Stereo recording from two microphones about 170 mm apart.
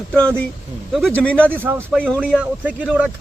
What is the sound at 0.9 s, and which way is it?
Speech, 5° left (ahead or behind).